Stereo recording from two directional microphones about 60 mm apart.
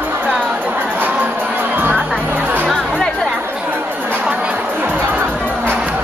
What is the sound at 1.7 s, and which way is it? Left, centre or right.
Music, right.